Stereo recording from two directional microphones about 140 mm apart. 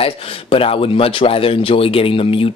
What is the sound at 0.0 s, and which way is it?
Speech, 40° left (ahead or behind).